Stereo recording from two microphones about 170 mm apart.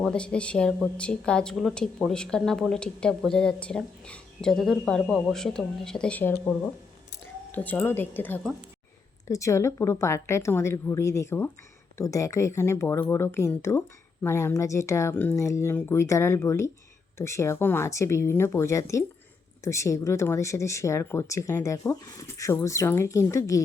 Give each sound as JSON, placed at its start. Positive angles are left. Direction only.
{"t": 0.0, "sound": "a woman's voice", "side_deg": 5}
{"t": 7.5, "sound": "speech", "side_deg": 10}